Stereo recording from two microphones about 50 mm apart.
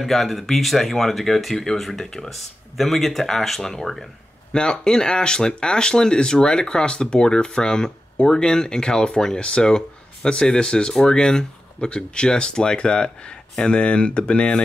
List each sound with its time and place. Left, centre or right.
0.0 s speech: centre